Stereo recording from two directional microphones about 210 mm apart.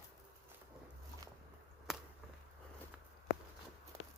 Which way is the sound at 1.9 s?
Centre (ahead or behind).